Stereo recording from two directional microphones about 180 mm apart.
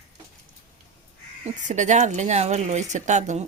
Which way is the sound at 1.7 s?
40° right (ahead or behind).